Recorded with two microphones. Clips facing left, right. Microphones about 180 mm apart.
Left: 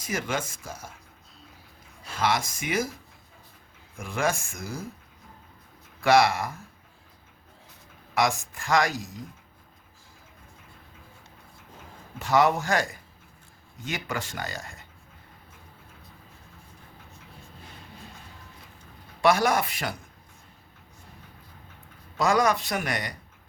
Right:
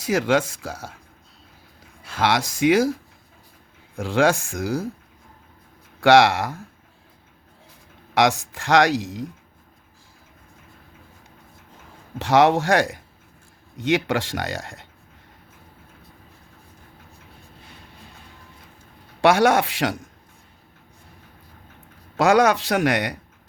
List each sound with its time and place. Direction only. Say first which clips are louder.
0.0 s speech: right 10 dB; 75° right (ahead or behind)
2.1 s speech: right 5 dB; 80° right
3.9 s speech: right 9 dB; 75° right (ahead or behind)
6.0 s speech: right 6 dB; 75° right (ahead or behind)
8.1 s speech: right 6 dB; 80° right
12.2 s speech: right 6 dB; 75° right (ahead or behind)
19.2 s speech: right 5 dB; 75° right (ahead or behind)
22.2 s speech: right 6 dB; 75° right (ahead or behind)